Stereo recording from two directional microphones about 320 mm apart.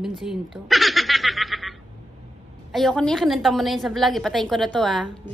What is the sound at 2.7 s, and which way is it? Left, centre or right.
Speech, centre.